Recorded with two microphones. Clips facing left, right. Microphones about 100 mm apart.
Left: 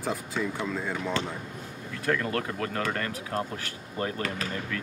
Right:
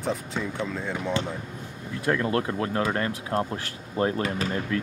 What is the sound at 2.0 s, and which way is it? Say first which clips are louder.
Speech: right 3 dB; 20° right (ahead or behind).